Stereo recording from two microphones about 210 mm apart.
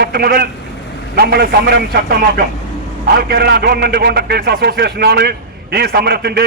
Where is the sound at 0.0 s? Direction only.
50° right (ahead or behind).